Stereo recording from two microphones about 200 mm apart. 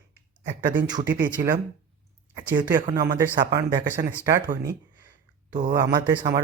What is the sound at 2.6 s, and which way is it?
Speech, 20° right (ahead or behind).